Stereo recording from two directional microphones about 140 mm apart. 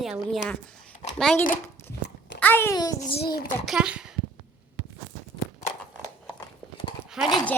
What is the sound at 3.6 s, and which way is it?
Speech, 5° right (ahead or behind).